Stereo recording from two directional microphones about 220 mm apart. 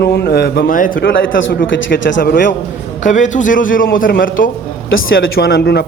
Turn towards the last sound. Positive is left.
turn(degrees=45)  # may be behind; listen again after turning